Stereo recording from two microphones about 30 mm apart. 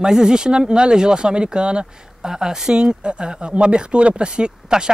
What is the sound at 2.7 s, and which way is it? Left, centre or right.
Speech, right.